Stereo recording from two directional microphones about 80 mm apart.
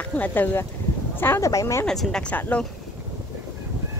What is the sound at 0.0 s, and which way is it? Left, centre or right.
Speech, left.